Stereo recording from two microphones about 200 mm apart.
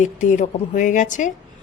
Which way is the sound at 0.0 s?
40° left (ahead or behind).